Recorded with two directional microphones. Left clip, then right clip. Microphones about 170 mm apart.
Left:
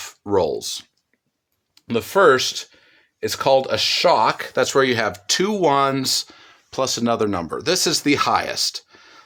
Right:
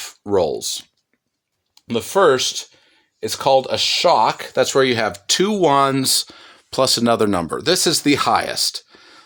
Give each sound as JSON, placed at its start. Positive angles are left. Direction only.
{"t": 0.0, "sound": "speech", "side_deg": -20}
{"t": 1.7, "sound": "speech", "side_deg": -15}